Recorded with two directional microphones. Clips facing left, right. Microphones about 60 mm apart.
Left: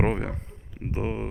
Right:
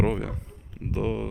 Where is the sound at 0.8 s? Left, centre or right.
Left.